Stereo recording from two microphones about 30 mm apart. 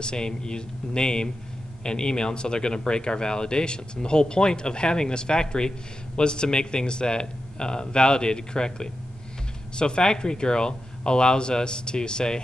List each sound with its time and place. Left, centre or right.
0.0 s speech: left